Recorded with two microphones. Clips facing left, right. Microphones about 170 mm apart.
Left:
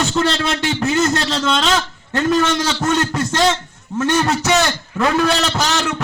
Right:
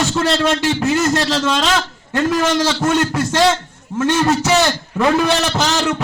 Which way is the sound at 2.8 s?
10° right (ahead or behind).